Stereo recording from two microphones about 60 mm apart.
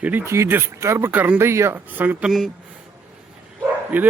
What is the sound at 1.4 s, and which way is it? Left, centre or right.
Speech, right.